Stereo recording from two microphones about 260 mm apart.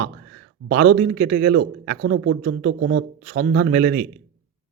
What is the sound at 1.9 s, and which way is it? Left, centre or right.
A man's voice, right.